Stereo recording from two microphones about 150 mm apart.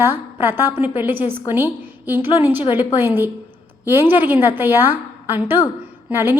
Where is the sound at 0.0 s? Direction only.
15° right (ahead or behind).